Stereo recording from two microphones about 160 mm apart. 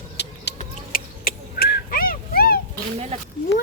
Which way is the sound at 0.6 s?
65° left (ahead or behind).